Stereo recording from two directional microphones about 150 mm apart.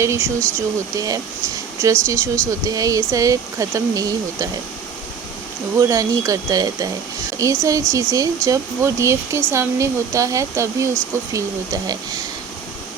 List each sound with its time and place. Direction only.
0.0 s speech: 20° right (ahead or behind)
5.8 s speech: 25° right (ahead or behind)